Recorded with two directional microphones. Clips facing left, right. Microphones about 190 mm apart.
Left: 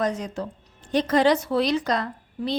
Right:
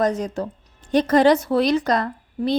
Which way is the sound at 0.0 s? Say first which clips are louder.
Right 5 dB; 40° right (ahead or behind).